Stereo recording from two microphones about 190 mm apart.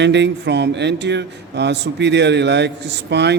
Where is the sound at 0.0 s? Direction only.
65° right (ahead or behind).